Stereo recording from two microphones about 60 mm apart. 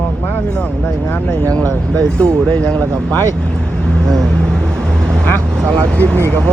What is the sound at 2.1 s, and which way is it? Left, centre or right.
Speech, centre.